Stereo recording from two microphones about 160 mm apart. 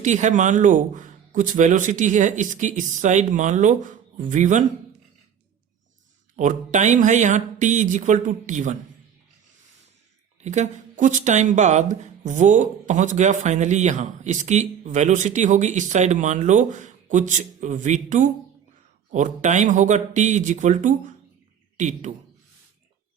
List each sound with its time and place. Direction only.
0.0 s speech: 50° right (ahead or behind)
6.3 s speech: 50° right (ahead or behind)
10.4 s speech: 45° right (ahead or behind)